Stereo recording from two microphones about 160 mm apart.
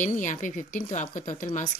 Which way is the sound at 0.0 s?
50° left (ahead or behind).